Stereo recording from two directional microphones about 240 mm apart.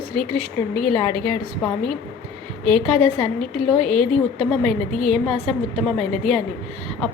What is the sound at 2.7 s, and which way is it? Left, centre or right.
A woman's voice, right.